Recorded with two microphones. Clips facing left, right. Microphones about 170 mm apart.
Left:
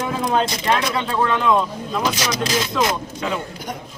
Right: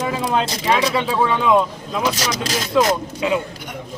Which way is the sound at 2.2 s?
40° right (ahead or behind).